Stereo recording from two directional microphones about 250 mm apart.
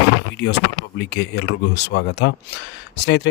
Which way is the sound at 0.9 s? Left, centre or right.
Left.